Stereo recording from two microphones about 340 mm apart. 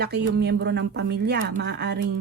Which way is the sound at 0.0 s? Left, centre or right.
Right.